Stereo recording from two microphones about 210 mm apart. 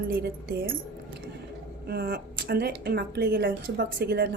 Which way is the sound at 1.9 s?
50° right (ahead or behind).